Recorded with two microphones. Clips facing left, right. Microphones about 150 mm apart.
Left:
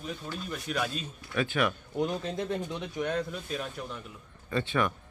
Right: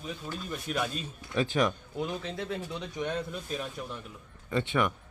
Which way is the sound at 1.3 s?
35° right (ahead or behind).